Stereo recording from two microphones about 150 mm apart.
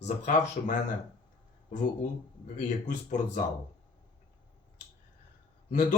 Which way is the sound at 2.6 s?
55° left (ahead or behind).